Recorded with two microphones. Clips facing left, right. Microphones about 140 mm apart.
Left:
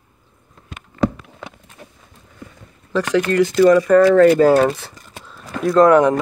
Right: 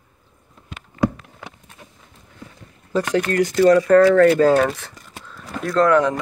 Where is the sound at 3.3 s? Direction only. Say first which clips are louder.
Left 2 dB; 50° right (ahead or behind).